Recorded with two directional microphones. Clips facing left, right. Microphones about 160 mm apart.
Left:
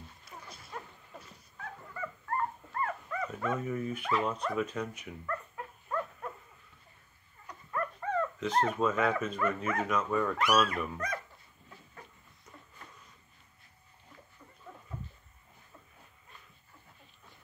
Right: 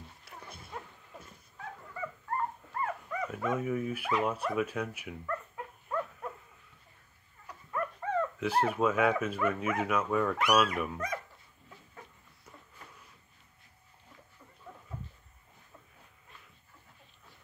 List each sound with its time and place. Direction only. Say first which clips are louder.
2.7 s speech: even; 10° right (ahead or behind)
5.9 s dog: right 1 dB; 10° right (ahead or behind)
7.4 s speech: even; 10° right (ahead or behind)